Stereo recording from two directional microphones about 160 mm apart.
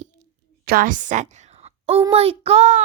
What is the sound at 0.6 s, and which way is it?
A woman's voice, 65° right (ahead or behind).